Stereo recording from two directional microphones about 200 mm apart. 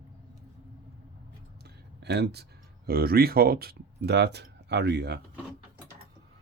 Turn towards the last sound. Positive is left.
turn(degrees=-55)  # may be behind; listen again after turning